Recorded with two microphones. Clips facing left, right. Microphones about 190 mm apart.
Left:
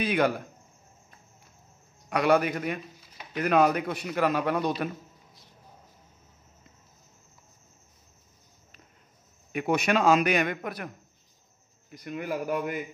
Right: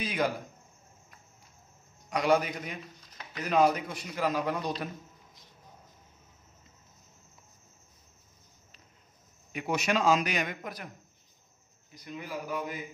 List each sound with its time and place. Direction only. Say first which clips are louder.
0.0 s a sound: left 5 dB; 65° left (ahead or behind)
2.0 s a man's voice: left 3 dB; 60° left (ahead or behind)
9.5 s a man's voice: left 4 dB; 55° left (ahead or behind)
11.9 s a man's voice: left 7 dB; 55° left (ahead or behind)